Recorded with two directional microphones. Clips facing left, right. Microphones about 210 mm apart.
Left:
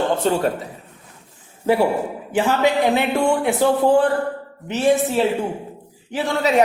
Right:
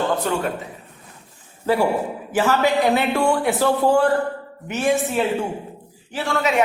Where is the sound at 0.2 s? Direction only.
30° left (ahead or behind).